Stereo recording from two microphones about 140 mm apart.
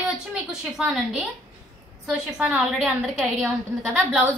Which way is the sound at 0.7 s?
5° right (ahead or behind).